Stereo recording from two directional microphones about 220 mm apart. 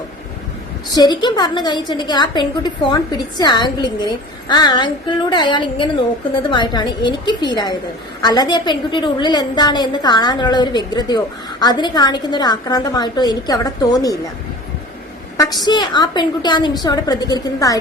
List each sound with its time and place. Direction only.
0.9 s a woman's voice: 20° left (ahead or behind)
15.6 s a woman's voice: 20° left (ahead or behind)